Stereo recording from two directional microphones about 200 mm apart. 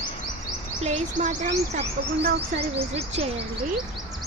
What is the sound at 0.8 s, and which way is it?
Speech, 35° right (ahead or behind).